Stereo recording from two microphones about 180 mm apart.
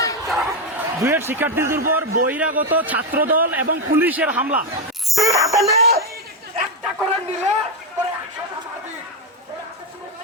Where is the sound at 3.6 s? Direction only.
55° right (ahead or behind).